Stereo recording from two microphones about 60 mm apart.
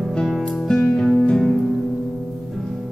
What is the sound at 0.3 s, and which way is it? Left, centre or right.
Music, centre.